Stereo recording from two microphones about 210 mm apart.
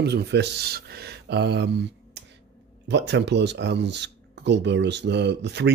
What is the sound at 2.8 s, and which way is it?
Speech, 55° right (ahead or behind).